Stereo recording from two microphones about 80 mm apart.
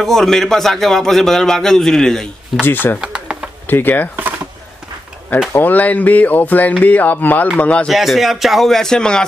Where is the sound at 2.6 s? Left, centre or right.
Left.